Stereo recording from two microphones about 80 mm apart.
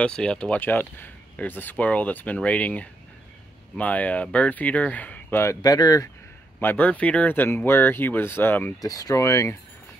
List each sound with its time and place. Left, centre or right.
0.0 s speech: centre
0.6 s speech: left
5.6 s speech: left
6.6 s speech: left
8.8 s speech: left